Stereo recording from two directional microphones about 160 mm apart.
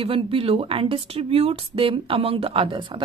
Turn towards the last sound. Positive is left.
turn(degrees=-30)  # may be behind; listen again after turning